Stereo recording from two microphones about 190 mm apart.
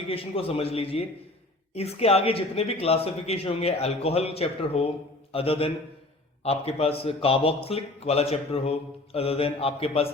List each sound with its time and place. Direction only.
0.1 s a man's voice: 30° left (ahead or behind)